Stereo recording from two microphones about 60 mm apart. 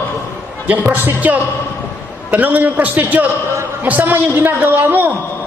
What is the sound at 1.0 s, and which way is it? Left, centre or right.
A man's voice, right.